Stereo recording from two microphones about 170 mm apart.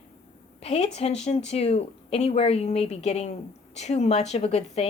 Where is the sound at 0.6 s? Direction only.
40° left (ahead or behind).